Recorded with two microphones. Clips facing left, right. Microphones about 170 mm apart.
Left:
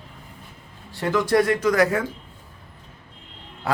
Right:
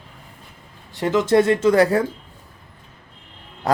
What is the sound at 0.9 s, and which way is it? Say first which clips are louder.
Speech: right 3 dB; 20° right (ahead or behind).